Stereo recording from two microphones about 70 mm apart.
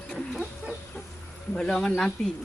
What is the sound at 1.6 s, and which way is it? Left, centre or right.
Speech, centre.